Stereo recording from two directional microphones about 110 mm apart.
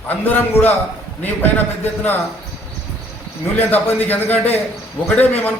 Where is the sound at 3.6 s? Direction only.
15° left (ahead or behind).